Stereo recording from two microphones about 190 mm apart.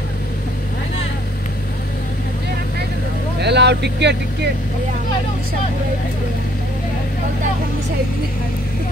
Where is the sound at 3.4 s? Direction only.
65° right (ahead or behind).